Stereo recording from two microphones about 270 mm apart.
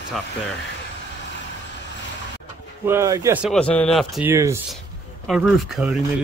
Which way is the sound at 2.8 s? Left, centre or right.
Centre.